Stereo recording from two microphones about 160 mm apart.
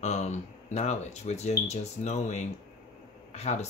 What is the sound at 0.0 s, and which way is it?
Speech, 45° left (ahead or behind).